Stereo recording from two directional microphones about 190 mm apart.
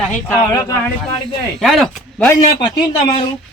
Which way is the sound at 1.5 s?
Centre (ahead or behind).